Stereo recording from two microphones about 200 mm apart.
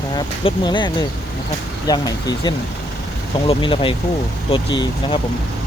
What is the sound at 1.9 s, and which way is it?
Speech, 20° left (ahead or behind).